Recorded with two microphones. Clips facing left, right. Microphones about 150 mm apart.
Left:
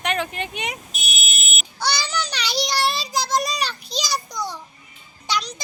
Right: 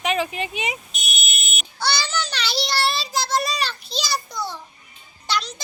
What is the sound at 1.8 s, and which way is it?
Child singing, 10° left (ahead or behind).